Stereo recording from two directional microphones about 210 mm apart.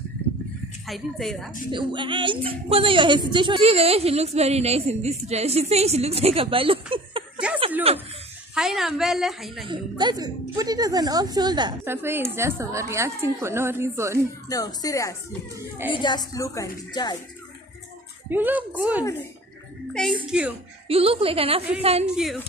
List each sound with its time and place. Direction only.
0.8 s a woman's voice: centre (ahead or behind)
1.7 s a woman's voice: 20° right (ahead or behind)
8.5 s a woman's voice: centre (ahead or behind)
9.7 s a woman's voice: 20° right (ahead or behind)
14.5 s speech: 15° left (ahead or behind)
18.3 s a woman's voice: 10° right (ahead or behind)
20.2 s a woman's voice: 5° right (ahead or behind)
20.9 s a woman's voice: 25° right (ahead or behind)
22.0 s a woman's voice: centre (ahead or behind)